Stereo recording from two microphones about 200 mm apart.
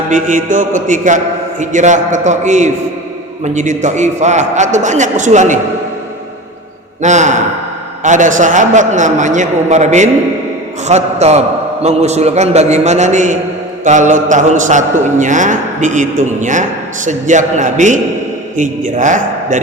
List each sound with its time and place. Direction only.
0.1 s a man's voice: 40° right (ahead or behind)
7.0 s a man's voice: 35° right (ahead or behind)